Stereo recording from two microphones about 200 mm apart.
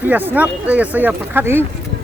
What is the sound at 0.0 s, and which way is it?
Speech, 10° right (ahead or behind).